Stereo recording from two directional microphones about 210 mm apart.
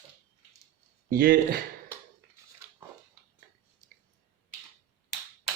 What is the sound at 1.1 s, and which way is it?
Speech, 40° right (ahead or behind).